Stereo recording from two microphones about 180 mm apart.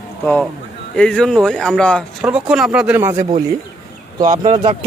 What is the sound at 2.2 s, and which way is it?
Speech, 5° right (ahead or behind).